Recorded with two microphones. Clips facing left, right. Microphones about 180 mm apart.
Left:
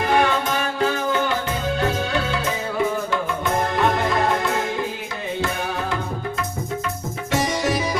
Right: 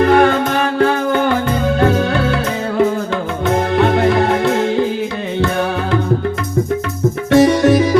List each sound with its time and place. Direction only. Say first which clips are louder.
0.0 s music: right 8 dB; 60° right (ahead or behind)
7.3 s music: right 12 dB; 60° right (ahead or behind)